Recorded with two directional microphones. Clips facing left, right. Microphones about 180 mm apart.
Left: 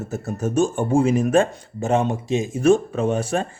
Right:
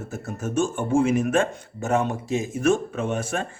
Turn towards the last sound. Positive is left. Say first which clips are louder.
# left 5 dB
turn(degrees=35)  # may be behind; listen again after turning